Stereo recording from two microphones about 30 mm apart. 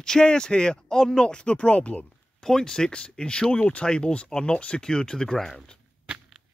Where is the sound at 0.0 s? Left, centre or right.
Left.